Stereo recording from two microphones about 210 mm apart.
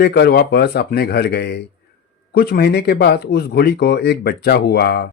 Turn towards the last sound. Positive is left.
turn(degrees=50)  # may be behind; listen again after turning